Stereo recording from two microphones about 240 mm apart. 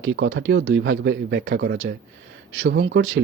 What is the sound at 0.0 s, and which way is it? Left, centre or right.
Speech, right.